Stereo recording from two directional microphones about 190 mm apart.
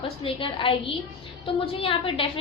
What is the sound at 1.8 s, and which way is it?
Speech, 30° left (ahead or behind).